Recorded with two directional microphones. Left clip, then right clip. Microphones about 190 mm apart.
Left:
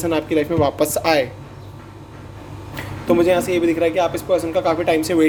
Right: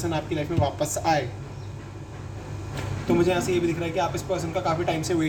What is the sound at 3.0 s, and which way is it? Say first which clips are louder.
A man's voice: left 7 dB; 50° left (ahead or behind).